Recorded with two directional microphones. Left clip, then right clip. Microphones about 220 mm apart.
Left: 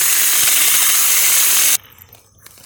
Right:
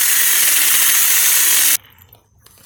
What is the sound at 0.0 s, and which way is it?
Ratchet, centre (ahead or behind).